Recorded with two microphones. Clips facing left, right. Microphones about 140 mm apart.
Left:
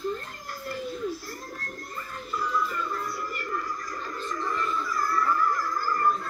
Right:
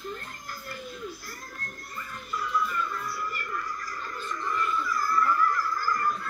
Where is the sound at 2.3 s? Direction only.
30° left (ahead or behind).